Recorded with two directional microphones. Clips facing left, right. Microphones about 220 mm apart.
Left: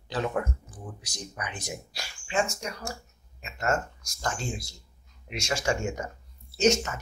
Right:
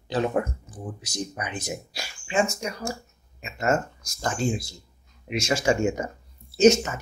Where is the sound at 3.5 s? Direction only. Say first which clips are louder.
Right 4 dB; 5° right (ahead or behind).